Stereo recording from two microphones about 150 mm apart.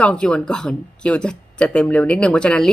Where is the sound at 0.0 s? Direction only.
5° left (ahead or behind).